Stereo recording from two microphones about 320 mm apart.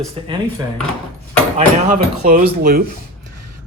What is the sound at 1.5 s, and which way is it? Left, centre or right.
Speech, right.